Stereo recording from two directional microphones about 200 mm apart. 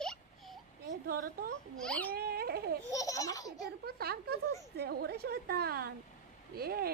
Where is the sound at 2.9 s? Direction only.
15° left (ahead or behind).